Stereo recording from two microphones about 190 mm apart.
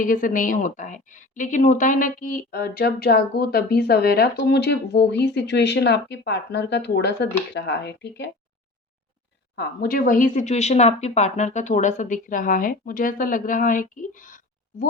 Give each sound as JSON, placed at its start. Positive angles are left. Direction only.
{"t": 0.0, "sound": "speech", "side_deg": 45}
{"t": 9.6, "sound": "speech", "side_deg": 50}